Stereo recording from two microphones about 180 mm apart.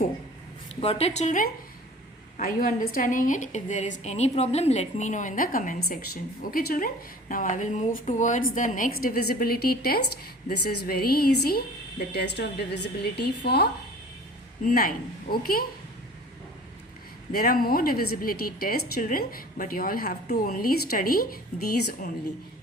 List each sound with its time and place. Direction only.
0.8 s a woman's voice: 35° left (ahead or behind)
2.4 s a woman's voice: 55° left (ahead or behind)
14.6 s a woman's voice: 50° left (ahead or behind)
17.3 s a woman's voice: 55° left (ahead or behind)